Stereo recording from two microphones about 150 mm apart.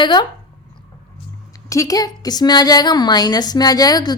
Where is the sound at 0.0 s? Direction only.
30° left (ahead or behind).